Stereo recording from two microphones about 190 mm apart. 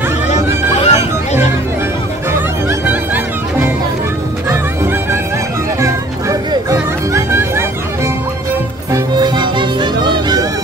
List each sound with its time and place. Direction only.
0.7 s a sound: 35° left (ahead or behind)
5.8 s music: 15° right (ahead or behind)
8.9 s music: 20° right (ahead or behind)